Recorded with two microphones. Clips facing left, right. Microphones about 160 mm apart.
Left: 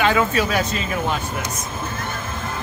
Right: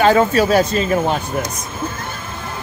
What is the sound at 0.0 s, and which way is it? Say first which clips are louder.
Speech: right 6 dB; 35° right (ahead or behind).